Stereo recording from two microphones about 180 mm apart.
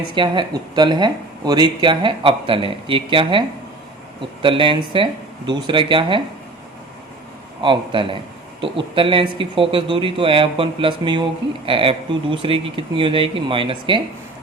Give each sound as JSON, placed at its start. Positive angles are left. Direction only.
{"t": 0.1, "sound": "speech", "side_deg": -25}
{"t": 4.4, "sound": "speech", "side_deg": -30}
{"t": 7.6, "sound": "speech", "side_deg": -25}